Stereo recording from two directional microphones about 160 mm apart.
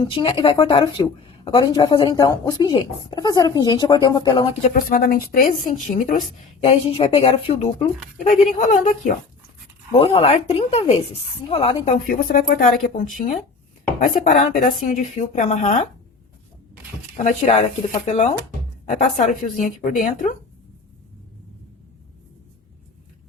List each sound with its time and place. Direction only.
0.0 s speech: 30° left (ahead or behind)
4.7 s a woman's voice: 70° left (ahead or behind); by 7.9 s 40° left (ahead or behind)
8.3 s a woman's voice: 55° left (ahead or behind)
9.9 s speech: 35° left (ahead or behind)
12.0 s a woman's voice: 60° left (ahead or behind)
17.2 s a woman's voice: 50° left (ahead or behind)
18.9 s a woman's voice: 50° left (ahead or behind)